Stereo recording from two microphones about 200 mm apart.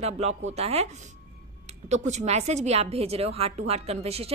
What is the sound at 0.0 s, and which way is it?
Speech, 30° right (ahead or behind).